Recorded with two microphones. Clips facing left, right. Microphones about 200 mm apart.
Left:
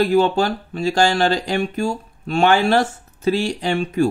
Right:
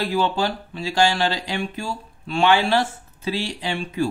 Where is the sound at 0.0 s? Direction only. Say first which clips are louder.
Left 6 dB; 45° left (ahead or behind).